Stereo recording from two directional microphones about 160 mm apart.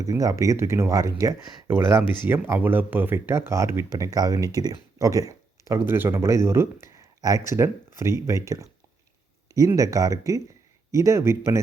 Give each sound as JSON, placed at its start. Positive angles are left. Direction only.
{"t": 0.0, "sound": "speech", "side_deg": -20}